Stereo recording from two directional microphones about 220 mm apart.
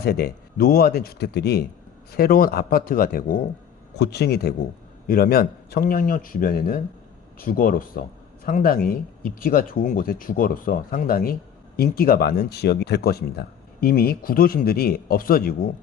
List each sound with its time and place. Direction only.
0.0 s speech: 45° left (ahead or behind)